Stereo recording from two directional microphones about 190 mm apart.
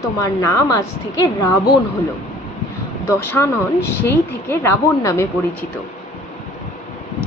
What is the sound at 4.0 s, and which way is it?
Speech, 10° left (ahead or behind).